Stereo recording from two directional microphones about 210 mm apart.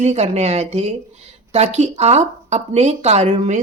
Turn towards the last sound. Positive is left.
turn(degrees=-35)  # may be behind; listen again after turning